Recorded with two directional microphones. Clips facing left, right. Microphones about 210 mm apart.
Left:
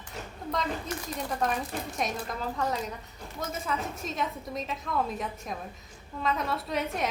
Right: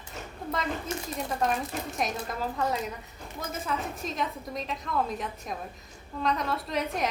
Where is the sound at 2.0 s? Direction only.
Centre (ahead or behind).